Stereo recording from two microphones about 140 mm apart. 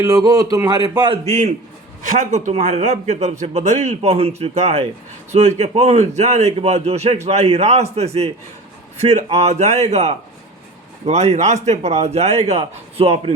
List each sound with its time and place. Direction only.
0.0 s a man's voice: 25° right (ahead or behind); by 1.5 s 55° right (ahead or behind)
2.0 s speech: 65° right (ahead or behind); by 13.3 s 45° right (ahead or behind)